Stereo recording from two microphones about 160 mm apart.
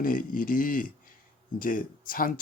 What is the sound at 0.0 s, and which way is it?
Speech, 60° left (ahead or behind).